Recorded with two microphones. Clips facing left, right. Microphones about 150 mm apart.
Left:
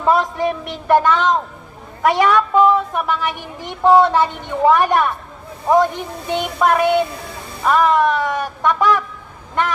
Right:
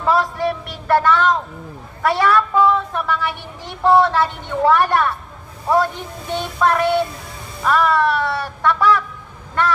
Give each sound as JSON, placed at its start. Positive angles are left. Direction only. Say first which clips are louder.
{"t": 0.0, "sound": "a man's voice", "louder": "left 2 dB", "side_deg": 20}